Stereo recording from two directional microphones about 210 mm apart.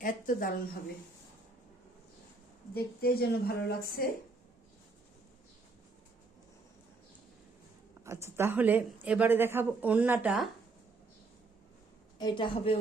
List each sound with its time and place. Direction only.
0.0 s speech: 40° left (ahead or behind)
2.7 s a woman's voice: 45° left (ahead or behind)
8.0 s speech: 15° right (ahead or behind)
12.2 s a woman's voice: 25° left (ahead or behind)